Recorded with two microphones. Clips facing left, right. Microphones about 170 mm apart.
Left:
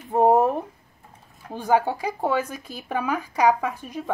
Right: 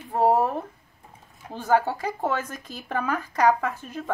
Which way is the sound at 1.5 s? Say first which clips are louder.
Left 1 dB; 15° left (ahead or behind).